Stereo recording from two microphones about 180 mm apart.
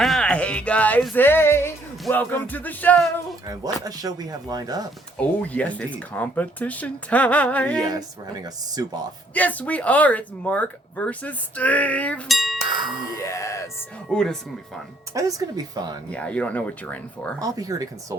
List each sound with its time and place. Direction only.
0.0 s music: 5° left (ahead or behind)
3.4 s speech: 20° right (ahead or behind)
5.1 s speech: 10° left (ahead or behind)
7.8 s speech: 20° right (ahead or behind)
9.3 s speech: 10° left (ahead or behind)
13.2 s music: 15° left (ahead or behind)
14.1 s speech: 5° left (ahead or behind)
15.1 s speech: 20° right (ahead or behind)
16.0 s speech: 5° left (ahead or behind)
17.4 s speech: 20° right (ahead or behind)